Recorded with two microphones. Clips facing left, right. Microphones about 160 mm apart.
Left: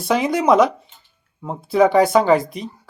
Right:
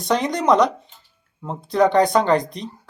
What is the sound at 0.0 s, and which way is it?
Speech, 5° left (ahead or behind).